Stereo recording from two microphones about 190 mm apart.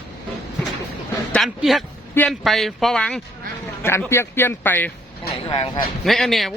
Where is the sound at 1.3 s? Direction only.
Centre (ahead or behind).